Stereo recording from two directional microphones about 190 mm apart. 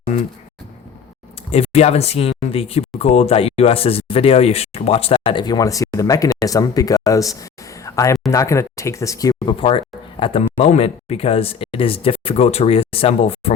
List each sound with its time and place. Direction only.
1.5 s speech: 35° left (ahead or behind); by 7.3 s 15° left (ahead or behind)
7.9 s a sound: 15° left (ahead or behind)
8.3 s speech: 15° left (ahead or behind); by 13.5 s 30° left (ahead or behind)